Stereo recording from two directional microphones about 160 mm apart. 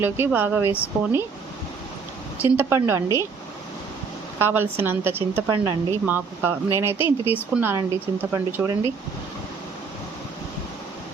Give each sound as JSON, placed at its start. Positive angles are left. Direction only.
{"t": 0.3, "sound": "speech", "side_deg": -10}
{"t": 2.4, "sound": "speech", "side_deg": -15}
{"t": 4.4, "sound": "speech", "side_deg": -15}
{"t": 5.5, "sound": "speech", "side_deg": -25}
{"t": 6.1, "sound": "speech", "side_deg": -10}